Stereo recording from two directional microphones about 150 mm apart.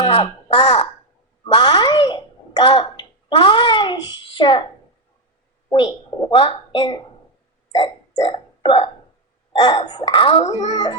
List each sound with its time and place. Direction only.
0.0 s a child's voice: 35° left (ahead or behind)
5.7 s a woman's voice: 35° left (ahead or behind)
7.8 s burping: 30° left (ahead or behind)
9.5 s speech: 30° left (ahead or behind)